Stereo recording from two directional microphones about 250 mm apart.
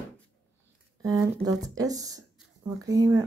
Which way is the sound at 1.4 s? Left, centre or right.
Centre.